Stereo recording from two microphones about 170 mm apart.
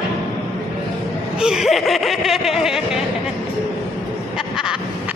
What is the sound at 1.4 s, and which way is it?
Speech, 5° right (ahead or behind).